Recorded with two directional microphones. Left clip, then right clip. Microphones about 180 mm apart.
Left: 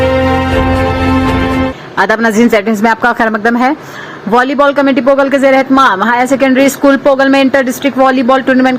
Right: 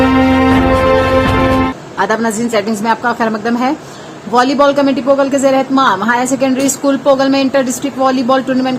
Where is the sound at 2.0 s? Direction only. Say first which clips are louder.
Left 5 dB; 30° left (ahead or behind).